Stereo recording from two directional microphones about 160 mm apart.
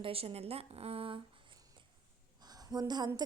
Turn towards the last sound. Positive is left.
turn(degrees=-25)  # may be behind; listen again after turning